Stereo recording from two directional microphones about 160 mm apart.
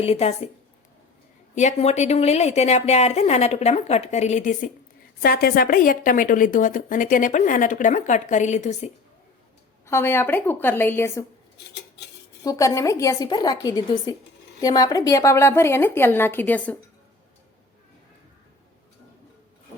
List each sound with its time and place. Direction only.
0.0 s a woman's voice: 40° left (ahead or behind)
1.5 s a woman's voice: 45° left (ahead or behind)
5.2 s a woman's voice: 75° left (ahead or behind); by 8.9 s 45° left (ahead or behind)
9.8 s a woman's voice: 15° left (ahead or behind)
12.4 s a woman's voice: 20° left (ahead or behind)